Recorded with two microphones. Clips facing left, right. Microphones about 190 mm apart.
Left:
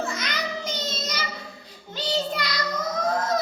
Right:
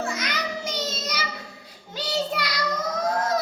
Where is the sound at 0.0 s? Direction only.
10° right (ahead or behind).